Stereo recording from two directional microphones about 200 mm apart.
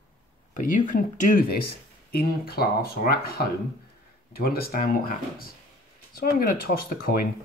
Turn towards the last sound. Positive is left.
turn(degrees=45)  # may be behind; listen again after turning